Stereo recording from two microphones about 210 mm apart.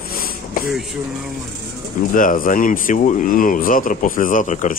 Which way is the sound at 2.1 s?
40° left (ahead or behind).